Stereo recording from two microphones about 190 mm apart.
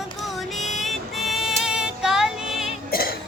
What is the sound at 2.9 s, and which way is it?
Cough, 55° left (ahead or behind).